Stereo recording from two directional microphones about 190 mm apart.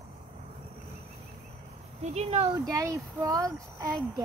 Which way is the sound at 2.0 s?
35° right (ahead or behind).